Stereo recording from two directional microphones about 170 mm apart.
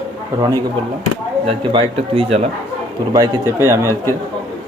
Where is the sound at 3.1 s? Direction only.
20° right (ahead or behind).